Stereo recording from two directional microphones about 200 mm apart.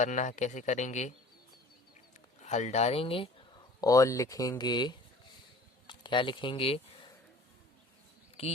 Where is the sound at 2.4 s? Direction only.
35° left (ahead or behind).